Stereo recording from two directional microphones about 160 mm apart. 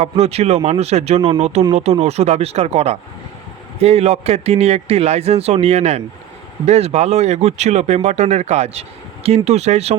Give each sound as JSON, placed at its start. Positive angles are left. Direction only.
{"t": 0.0, "sound": "speech", "side_deg": -40}